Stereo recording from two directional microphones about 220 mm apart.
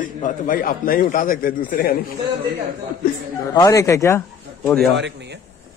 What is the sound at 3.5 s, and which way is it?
Speech, 15° left (ahead or behind).